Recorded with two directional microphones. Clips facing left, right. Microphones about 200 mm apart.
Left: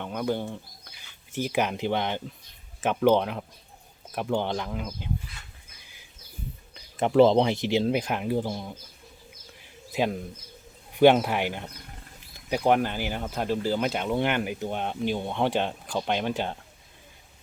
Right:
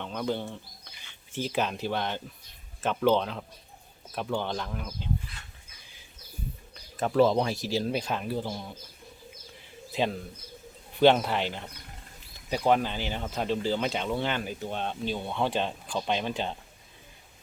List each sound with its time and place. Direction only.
0.0 s speech: 10° left (ahead or behind)
7.0 s speech: 25° left (ahead or behind)
9.9 s speech: 10° left (ahead or behind)